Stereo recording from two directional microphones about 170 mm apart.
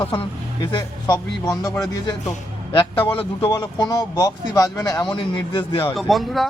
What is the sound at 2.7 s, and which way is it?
Speech, 30° left (ahead or behind).